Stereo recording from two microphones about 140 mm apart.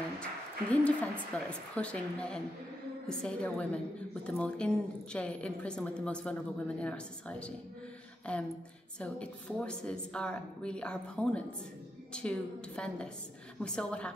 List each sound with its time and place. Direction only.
0.2 s a woman's voice: 10° left (ahead or behind)